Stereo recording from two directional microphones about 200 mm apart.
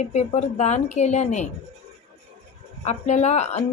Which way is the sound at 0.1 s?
35° left (ahead or behind).